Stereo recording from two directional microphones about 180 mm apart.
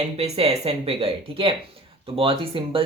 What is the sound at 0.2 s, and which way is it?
A woman's voice, 35° right (ahead or behind).